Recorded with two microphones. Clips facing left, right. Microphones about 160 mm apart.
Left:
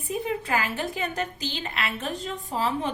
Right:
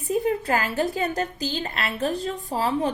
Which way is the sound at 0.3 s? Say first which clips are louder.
Right 4 dB; 40° right (ahead or behind).